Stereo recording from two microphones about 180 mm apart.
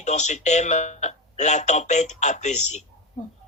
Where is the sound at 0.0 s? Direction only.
40° left (ahead or behind).